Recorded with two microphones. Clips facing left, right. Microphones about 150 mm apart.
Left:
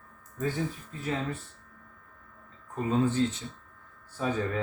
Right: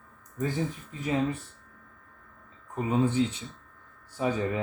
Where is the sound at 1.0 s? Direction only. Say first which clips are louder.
Right 5 dB; 15° right (ahead or behind).